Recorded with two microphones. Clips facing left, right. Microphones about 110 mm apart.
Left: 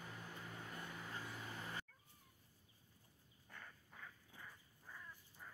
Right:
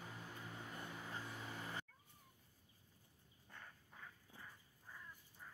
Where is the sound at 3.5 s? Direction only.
15° right (ahead or behind).